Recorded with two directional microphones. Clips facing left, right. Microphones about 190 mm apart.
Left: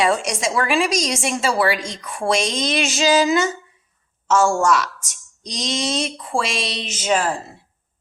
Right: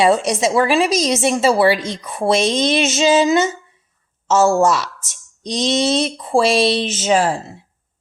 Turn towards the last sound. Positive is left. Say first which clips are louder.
# right 4 dB
turn(degrees=-30)  # may be behind; listen again after turning